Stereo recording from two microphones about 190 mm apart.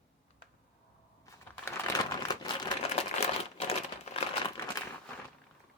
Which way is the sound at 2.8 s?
35° left (ahead or behind).